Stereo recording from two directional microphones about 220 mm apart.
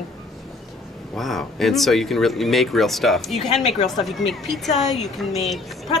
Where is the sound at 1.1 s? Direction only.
Centre (ahead or behind).